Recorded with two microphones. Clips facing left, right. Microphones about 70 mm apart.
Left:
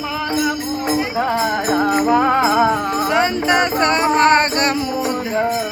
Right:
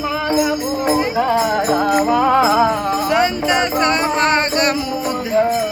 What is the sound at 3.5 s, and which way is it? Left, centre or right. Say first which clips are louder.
Music: even; left.